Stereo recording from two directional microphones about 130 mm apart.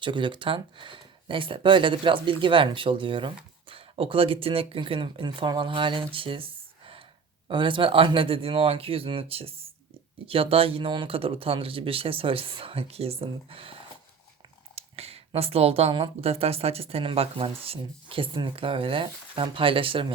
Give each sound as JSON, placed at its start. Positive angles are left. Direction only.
{"t": 0.0, "sound": "speech", "side_deg": -40}
{"t": 14.8, "sound": "speech", "side_deg": -50}